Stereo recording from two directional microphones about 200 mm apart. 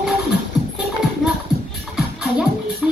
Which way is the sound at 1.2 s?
Centre (ahead or behind).